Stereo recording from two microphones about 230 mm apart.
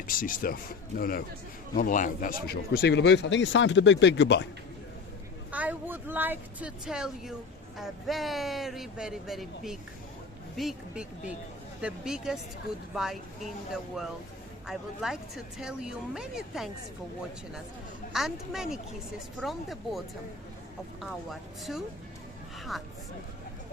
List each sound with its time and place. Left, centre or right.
0.1 s speech: left
5.5 s speech: centre
14.7 s speech: centre
18.1 s speech: centre
21.0 s speech: centre